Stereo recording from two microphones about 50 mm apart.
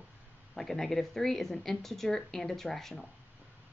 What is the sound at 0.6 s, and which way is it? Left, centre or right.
Speech, centre.